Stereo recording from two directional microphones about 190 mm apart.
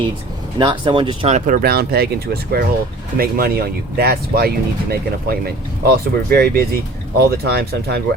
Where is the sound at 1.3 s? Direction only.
45° right (ahead or behind).